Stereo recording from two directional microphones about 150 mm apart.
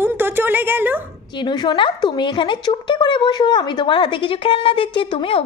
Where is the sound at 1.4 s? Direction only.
30° left (ahead or behind).